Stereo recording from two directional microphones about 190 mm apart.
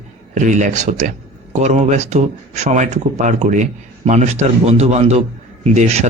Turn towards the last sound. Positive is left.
turn(degrees=-35)  # may be behind; listen again after turning